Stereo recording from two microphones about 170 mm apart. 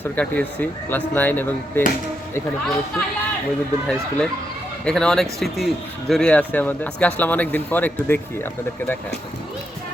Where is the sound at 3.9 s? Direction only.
5° left (ahead or behind).